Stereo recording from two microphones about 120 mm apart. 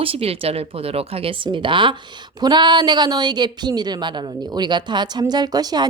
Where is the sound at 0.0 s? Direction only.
50° right (ahead or behind).